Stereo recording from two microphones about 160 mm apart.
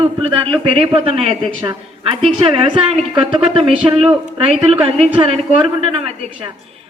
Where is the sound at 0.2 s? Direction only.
35° right (ahead or behind).